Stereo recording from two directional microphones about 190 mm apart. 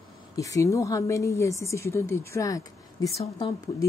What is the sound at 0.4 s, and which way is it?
A woman's voice, 15° left (ahead or behind).